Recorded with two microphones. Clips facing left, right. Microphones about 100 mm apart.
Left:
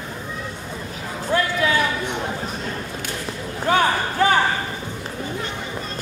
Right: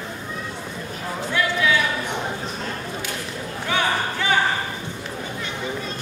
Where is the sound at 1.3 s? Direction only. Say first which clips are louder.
Left 1 dB; 40° left (ahead or behind).